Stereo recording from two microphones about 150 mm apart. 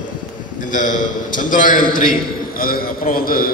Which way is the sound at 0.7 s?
60° left (ahead or behind).